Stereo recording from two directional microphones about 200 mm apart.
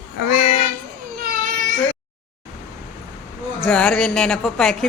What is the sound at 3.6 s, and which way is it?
Speech, 5° left (ahead or behind).